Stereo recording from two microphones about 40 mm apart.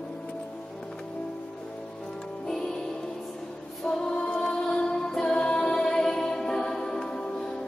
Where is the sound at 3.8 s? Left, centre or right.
Centre.